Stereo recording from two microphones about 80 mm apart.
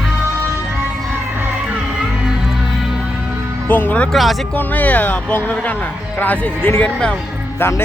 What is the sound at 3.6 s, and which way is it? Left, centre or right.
Speech, left.